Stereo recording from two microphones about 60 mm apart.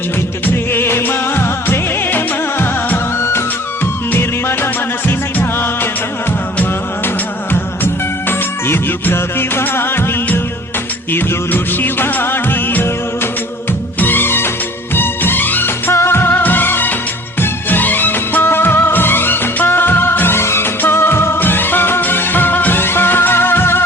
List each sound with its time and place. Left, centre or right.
0.4 s music: left
8.3 s music: left
11.1 s music of bollywood: left
14.0 s music: left
15.9 s music: left
17.4 s music of bollywood: left